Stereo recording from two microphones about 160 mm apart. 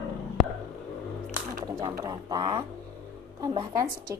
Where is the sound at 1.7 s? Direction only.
25° right (ahead or behind).